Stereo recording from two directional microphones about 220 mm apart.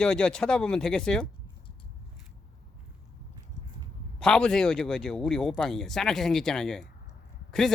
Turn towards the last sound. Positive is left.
turn(degrees=0)  # may be behind; listen again after turning